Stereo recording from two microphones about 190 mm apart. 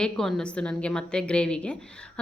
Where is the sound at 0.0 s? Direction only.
5° left (ahead or behind).